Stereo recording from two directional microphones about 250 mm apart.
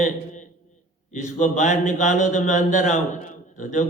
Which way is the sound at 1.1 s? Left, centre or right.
Left.